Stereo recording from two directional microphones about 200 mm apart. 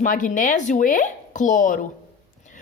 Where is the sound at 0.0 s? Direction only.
40° left (ahead or behind).